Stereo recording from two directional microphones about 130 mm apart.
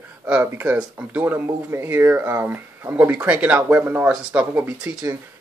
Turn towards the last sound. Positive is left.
turn(degrees=-15)  # may be behind; listen again after turning